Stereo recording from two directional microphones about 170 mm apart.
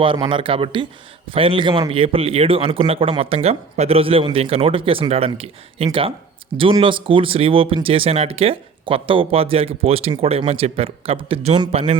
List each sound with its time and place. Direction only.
0.0 s speech: 30° right (ahead or behind)